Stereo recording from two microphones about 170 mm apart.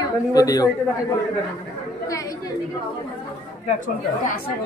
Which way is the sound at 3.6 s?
45° left (ahead or behind).